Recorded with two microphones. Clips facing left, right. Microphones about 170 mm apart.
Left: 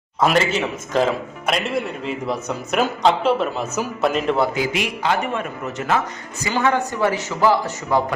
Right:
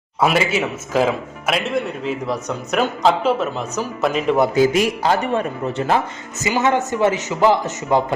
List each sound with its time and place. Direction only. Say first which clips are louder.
0.2 s a man's voice: even; 10° right (ahead or behind)
4.5 s a man's voice: right 7 dB; 45° right (ahead or behind)
6.4 s a man's voice: right 2 dB; 20° right (ahead or behind)